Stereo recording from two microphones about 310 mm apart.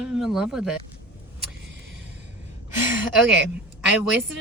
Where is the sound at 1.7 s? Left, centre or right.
Right.